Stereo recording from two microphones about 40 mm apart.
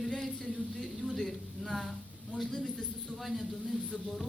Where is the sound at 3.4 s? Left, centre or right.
Centre.